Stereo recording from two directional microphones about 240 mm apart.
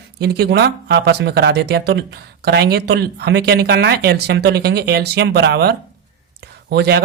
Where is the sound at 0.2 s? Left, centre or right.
Right.